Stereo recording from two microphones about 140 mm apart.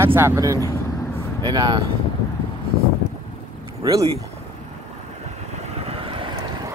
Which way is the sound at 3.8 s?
25° right (ahead or behind).